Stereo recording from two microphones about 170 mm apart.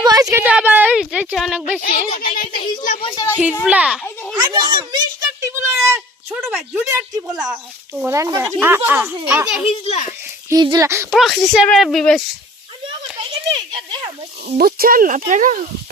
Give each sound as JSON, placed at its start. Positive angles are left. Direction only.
{"t": 0.0, "sound": "a sound", "side_deg": -20}
{"t": 0.4, "sound": "speech", "side_deg": -10}
{"t": 1.8, "sound": "a child's voice", "side_deg": 55}
{"t": 2.5, "sound": "speech", "side_deg": 25}
{"t": 3.6, "sound": "speech", "side_deg": -5}
{"t": 4.4, "sound": "a child's voice", "side_deg": -25}
{"t": 9.6, "sound": "a child's voice", "side_deg": 40}
{"t": 10.5, "sound": "a child's voice", "side_deg": -20}
{"t": 11.1, "sound": "speech", "side_deg": 0}
{"t": 13.3, "sound": "a child's voice", "side_deg": -30}
{"t": 14.6, "sound": "speech", "side_deg": -60}